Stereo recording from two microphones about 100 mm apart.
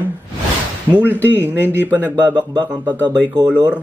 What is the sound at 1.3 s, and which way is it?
Speech, 20° right (ahead or behind).